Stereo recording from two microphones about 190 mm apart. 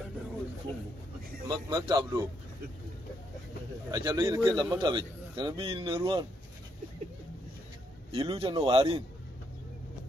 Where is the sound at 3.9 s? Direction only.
20° right (ahead or behind).